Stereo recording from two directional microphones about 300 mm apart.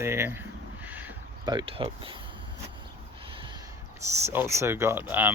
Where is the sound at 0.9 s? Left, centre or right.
Centre.